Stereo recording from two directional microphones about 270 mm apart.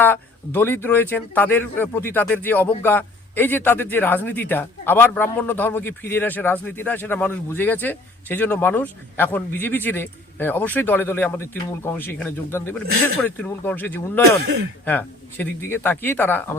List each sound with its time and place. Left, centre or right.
0.0 s speech: centre
14.4 s speech: right
14.8 s speech: centre